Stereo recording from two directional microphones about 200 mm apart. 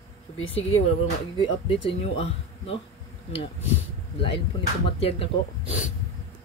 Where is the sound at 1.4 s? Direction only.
25° left (ahead or behind).